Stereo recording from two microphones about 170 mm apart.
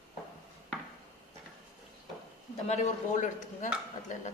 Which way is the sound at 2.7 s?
45° left (ahead or behind).